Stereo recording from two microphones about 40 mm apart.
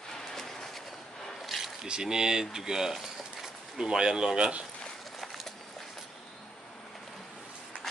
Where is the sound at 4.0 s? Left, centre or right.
Centre.